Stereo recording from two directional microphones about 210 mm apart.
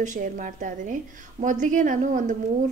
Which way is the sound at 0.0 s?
40° right (ahead or behind).